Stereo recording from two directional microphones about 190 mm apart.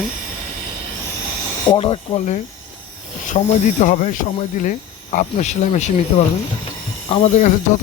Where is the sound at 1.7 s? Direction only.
25° left (ahead or behind).